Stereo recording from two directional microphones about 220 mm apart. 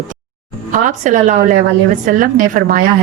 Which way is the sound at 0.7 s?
35° right (ahead or behind).